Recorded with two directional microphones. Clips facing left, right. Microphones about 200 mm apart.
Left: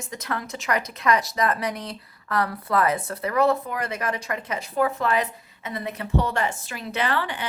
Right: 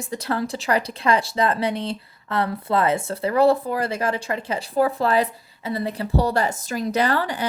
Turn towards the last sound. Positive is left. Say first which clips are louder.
# right 5 dB
turn(degrees=-40)  # may be behind; listen again after turning